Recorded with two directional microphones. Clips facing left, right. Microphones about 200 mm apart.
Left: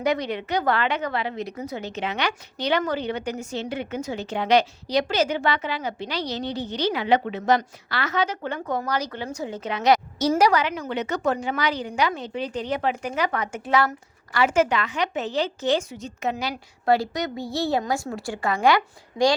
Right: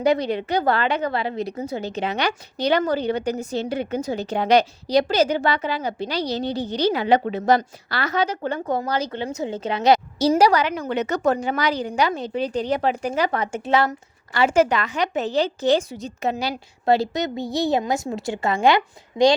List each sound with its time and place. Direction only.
0.0 s a woman's voice: 30° right (ahead or behind)